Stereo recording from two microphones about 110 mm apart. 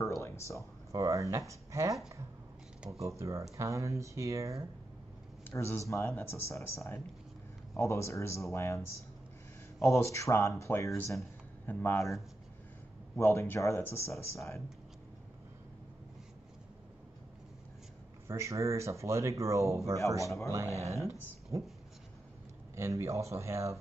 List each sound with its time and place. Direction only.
0.0 s a sound: 25° left (ahead or behind)
0.6 s speech: 30° right (ahead or behind)
5.5 s speech: 25° left (ahead or behind)
13.2 s speech: 20° left (ahead or behind)
18.2 s speech: 25° right (ahead or behind)
20.2 s speech: 30° left (ahead or behind)
22.8 s speech: 25° right (ahead or behind)